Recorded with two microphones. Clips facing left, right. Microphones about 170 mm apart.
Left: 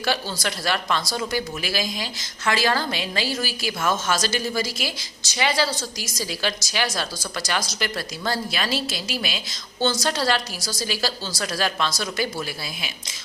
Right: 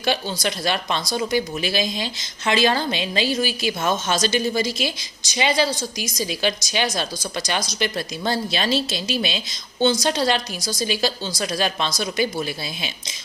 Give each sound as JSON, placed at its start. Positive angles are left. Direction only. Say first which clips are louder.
{"t": 0.0, "sound": "speech", "louder": "right 2 dB", "side_deg": -20}